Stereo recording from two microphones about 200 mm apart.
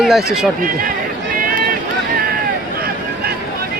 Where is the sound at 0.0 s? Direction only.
Centre (ahead or behind).